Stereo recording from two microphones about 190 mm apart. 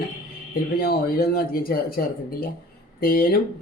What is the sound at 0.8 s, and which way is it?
Speech, 50° left (ahead or behind).